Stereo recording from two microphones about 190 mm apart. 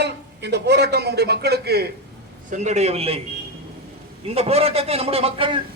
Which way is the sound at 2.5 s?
40° right (ahead or behind).